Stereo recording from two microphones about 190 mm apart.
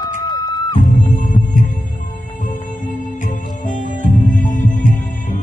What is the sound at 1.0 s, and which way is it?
Music, 40° left (ahead or behind).